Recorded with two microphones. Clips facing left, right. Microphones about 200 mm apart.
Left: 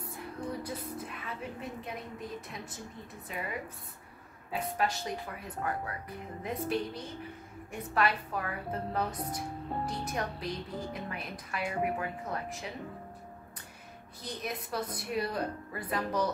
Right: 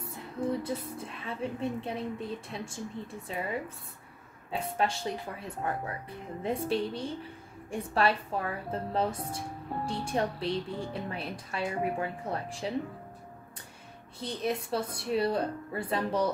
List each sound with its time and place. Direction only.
0.0 s speech: 25° right (ahead or behind)
14.2 s speech: 30° right (ahead or behind)